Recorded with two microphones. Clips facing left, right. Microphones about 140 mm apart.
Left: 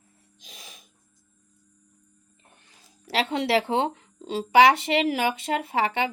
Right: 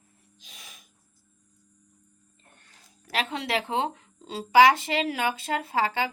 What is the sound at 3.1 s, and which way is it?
Speech, 30° left (ahead or behind).